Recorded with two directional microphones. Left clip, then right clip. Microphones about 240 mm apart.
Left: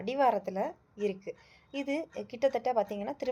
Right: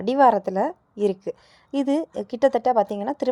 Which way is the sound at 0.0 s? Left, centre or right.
Right.